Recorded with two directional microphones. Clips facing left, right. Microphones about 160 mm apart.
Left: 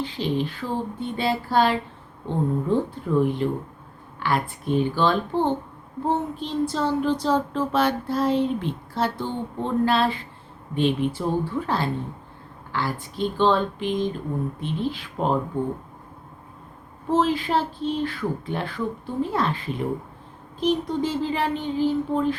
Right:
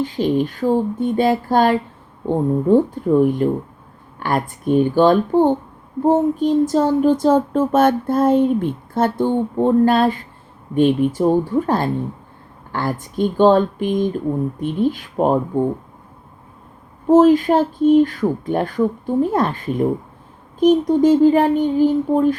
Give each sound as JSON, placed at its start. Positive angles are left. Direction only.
{"t": 0.0, "sound": "speech", "side_deg": -45}
{"t": 17.1, "sound": "speech", "side_deg": -45}